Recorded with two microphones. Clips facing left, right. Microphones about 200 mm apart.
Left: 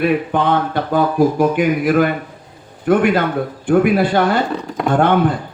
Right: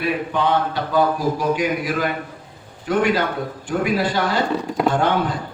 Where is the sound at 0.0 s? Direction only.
55° left (ahead or behind).